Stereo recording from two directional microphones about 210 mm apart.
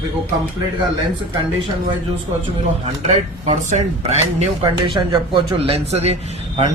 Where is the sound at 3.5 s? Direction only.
30° right (ahead or behind).